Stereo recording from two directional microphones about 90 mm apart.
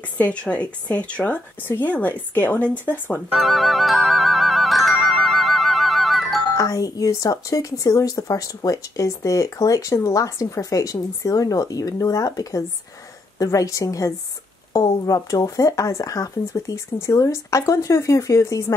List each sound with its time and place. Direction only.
0.2 s a woman's voice: 15° left (ahead or behind)
3.3 s music: centre (ahead or behind)
6.5 s speech: 40° left (ahead or behind)